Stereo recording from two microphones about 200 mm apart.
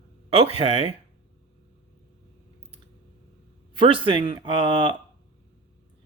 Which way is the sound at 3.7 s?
25° right (ahead or behind).